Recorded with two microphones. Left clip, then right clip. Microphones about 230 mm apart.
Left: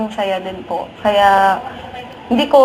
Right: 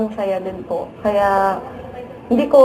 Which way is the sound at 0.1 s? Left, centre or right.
Centre.